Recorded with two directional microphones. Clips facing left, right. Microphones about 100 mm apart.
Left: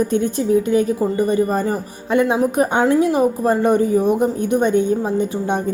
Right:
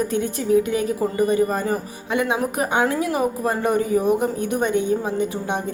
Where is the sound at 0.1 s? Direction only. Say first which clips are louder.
Left 3 dB; 30° left (ahead or behind).